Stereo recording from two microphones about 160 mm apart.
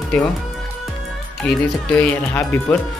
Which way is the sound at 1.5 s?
10° left (ahead or behind).